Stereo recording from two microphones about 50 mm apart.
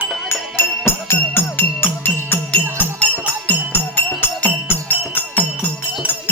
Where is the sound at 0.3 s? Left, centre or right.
Left.